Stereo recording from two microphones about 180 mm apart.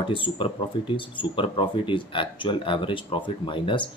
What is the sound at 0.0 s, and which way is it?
Speech, 30° left (ahead or behind).